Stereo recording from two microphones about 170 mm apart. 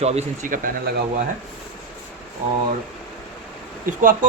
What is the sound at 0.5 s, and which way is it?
Speech, 55° right (ahead or behind).